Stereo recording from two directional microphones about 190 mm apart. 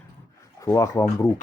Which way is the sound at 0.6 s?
15° left (ahead or behind).